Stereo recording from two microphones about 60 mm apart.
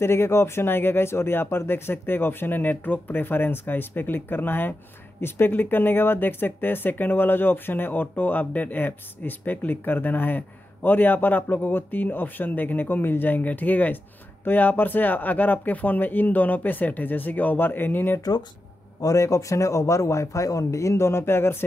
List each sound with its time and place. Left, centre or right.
0.0 s speech: left
18.9 s a man's voice: left